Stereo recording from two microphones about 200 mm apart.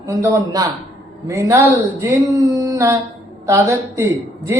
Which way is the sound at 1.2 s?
15° right (ahead or behind).